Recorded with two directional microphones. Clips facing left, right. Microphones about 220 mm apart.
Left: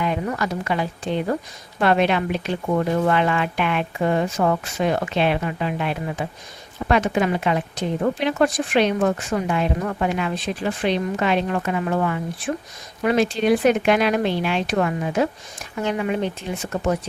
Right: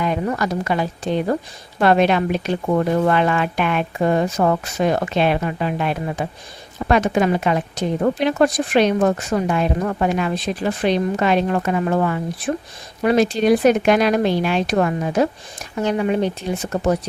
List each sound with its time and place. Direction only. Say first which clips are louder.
0.0 s a woman's voice: right 3 dB; 40° right (ahead or behind)